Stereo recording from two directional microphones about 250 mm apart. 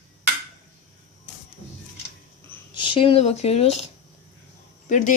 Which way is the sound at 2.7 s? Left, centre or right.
Centre.